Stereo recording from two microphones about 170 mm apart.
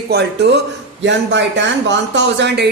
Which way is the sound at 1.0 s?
90° right.